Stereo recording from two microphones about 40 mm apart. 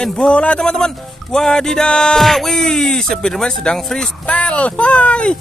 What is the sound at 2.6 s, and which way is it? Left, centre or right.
Speech, centre.